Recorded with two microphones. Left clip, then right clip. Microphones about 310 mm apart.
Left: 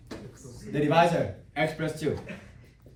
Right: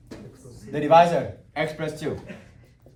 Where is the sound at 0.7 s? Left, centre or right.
Right.